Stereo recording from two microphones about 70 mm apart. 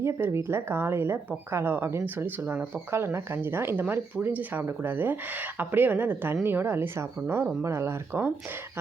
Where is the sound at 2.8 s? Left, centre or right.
Right.